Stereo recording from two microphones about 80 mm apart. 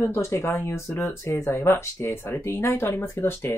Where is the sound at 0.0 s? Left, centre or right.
Left.